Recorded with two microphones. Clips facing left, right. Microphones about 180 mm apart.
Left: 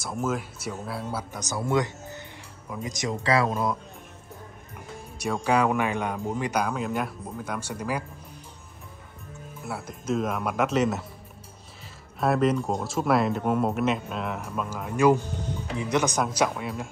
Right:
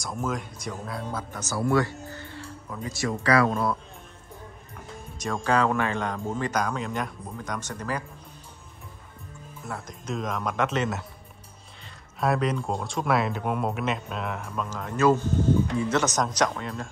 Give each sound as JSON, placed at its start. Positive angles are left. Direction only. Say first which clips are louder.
{"t": 0.0, "sound": "speech", "louder": "left 2 dB", "side_deg": 5}
{"t": 5.2, "sound": "speech", "louder": "left 1 dB", "side_deg": 10}
{"t": 9.7, "sound": "speech", "louder": "left 4 dB", "side_deg": 5}
{"t": 12.2, "sound": "speech", "louder": "left 3 dB", "side_deg": 0}